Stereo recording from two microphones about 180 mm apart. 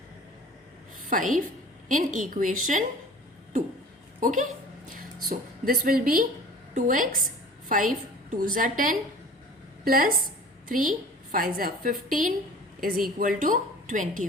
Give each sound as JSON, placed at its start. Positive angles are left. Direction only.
{"t": 1.1, "sound": "a woman's voice", "side_deg": -45}
{"t": 4.2, "sound": "a woman's voice", "side_deg": -45}